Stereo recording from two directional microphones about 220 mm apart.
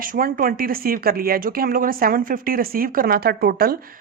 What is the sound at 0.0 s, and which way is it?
A woman's voice, 40° right (ahead or behind).